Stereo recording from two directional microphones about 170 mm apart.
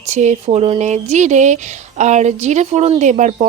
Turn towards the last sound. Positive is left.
turn(degrees=-45)  # may be behind; listen again after turning